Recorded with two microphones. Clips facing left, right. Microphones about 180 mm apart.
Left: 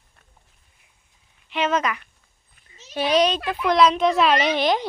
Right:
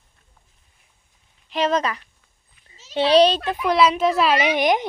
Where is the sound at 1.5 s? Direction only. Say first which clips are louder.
Right 2 dB; 35° right (ahead or behind).